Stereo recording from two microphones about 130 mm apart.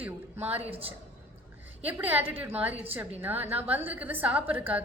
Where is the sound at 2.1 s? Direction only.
15° right (ahead or behind).